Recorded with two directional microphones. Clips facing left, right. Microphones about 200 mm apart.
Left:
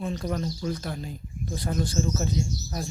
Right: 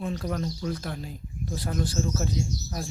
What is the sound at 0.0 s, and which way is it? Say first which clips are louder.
Speech: left 1 dB; 5° right (ahead or behind).